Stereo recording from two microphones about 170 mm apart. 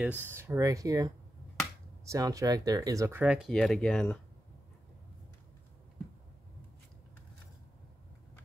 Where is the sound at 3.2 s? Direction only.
5° right (ahead or behind).